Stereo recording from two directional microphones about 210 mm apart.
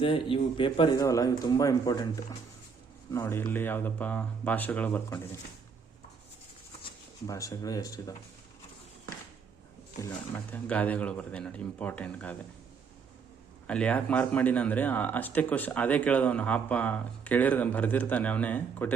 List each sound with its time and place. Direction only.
0.0 s a man's voice: 25° left (ahead or behind)
3.1 s speech: 10° left (ahead or behind)
7.3 s speech: 15° left (ahead or behind)
10.0 s speech: 10° left (ahead or behind)
13.7 s speech: 5° left (ahead or behind)